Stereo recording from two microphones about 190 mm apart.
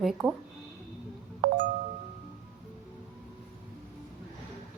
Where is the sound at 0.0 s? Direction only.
Centre (ahead or behind).